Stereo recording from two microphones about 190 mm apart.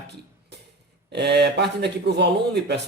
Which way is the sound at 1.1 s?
60° right (ahead or behind).